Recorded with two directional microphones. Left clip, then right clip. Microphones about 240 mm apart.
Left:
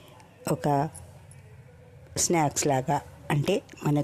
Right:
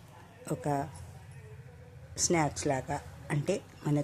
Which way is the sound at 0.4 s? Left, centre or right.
Left.